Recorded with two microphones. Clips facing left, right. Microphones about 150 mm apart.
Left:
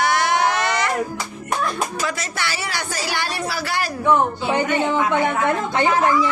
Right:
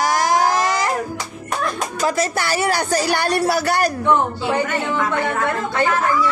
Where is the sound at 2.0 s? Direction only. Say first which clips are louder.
Right 6 dB; 40° right (ahead or behind).